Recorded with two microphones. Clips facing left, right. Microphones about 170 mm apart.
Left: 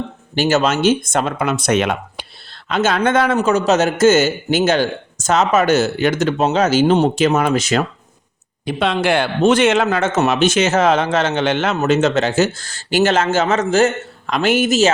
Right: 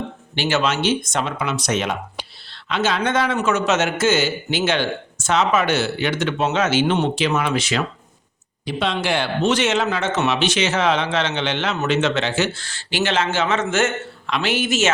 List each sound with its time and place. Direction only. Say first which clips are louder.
0.3 s a man's voice: left 5 dB; 40° left (ahead or behind); by 2.2 s 60° left (ahead or behind)
2.6 s a man's voice: left 4 dB; 45° left (ahead or behind)
8.6 s a man's voice: left 5 dB; 55° left (ahead or behind); by 14.9 s 40° left (ahead or behind)